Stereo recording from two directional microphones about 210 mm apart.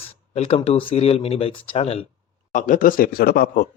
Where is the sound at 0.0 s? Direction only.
30° left (ahead or behind).